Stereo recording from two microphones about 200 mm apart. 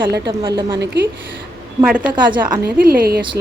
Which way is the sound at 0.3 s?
25° right (ahead or behind).